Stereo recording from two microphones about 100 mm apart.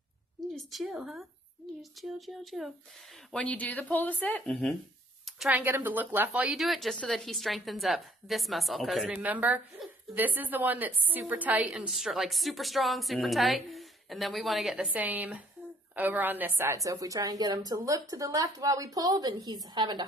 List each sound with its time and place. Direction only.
0.7 s a woman's voice: 5° right (ahead or behind)
3.3 s speech: 10° left (ahead or behind)
4.5 s a woman's voice: 5° left (ahead or behind)
5.5 s speech: 20° right (ahead or behind)
6.6 s a woman's voice: centre (ahead or behind)
9.1 s a woman's voice: 15° right (ahead or behind)
14.9 s speech: 15° right (ahead or behind)
16.8 s a woman's voice: 35° right (ahead or behind)